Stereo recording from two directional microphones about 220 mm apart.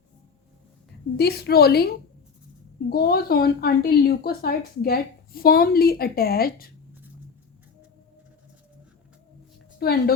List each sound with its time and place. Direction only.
1.1 s a woman's voice: 45° left (ahead or behind)
2.9 s a woman's voice: 45° left (ahead or behind)
9.7 s a woman's voice: 45° left (ahead or behind)